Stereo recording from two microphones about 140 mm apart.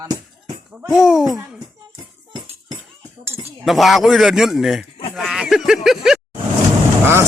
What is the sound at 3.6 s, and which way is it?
A man's voice, centre (ahead or behind).